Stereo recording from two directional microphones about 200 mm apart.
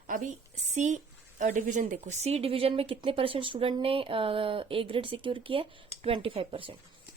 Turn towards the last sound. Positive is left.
turn(degrees=-25)  # may be behind; listen again after turning